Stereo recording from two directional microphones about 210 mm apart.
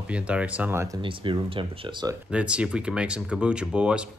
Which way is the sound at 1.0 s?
25° right (ahead or behind).